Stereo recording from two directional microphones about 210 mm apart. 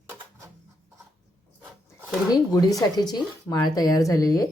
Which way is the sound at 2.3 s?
15° left (ahead or behind).